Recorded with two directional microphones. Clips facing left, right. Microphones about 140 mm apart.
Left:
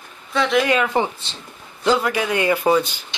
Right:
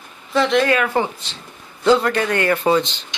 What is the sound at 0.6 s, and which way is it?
A man's voice, 20° left (ahead or behind).